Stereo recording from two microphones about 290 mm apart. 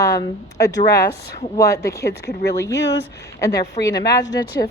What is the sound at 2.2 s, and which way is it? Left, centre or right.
Speech, left.